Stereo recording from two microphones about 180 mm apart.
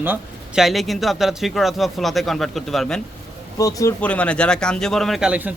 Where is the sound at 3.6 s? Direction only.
20° left (ahead or behind).